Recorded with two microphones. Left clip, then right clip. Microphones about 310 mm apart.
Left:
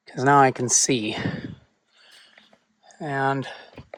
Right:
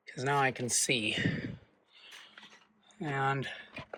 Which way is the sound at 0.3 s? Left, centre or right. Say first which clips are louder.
Left 13 dB; left.